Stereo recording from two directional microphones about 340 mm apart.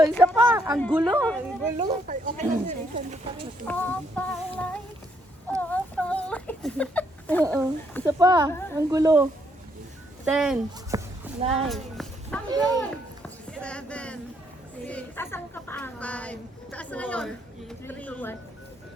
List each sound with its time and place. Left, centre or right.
0.3 s a sound: centre
0.8 s speech: centre
1.8 s speech: right
3.7 s a sound: centre
7.5 s speech: centre
8.0 s speech: centre
10.2 s speech: centre
11.3 s speech: centre
11.7 s a sound: centre
12.5 s speech: centre
13.5 s speech: centre